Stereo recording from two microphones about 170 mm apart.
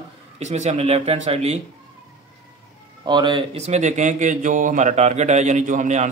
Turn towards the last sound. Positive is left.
turn(degrees=-45)  # may be behind; listen again after turning